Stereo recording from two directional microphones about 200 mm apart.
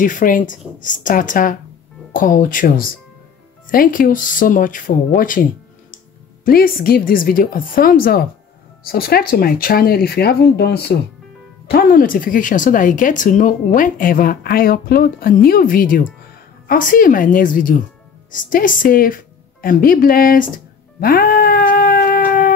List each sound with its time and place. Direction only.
0.0 s speech: 40° left (ahead or behind)
6.4 s speech: 45° left (ahead or behind)
18.3 s music: 40° left (ahead or behind)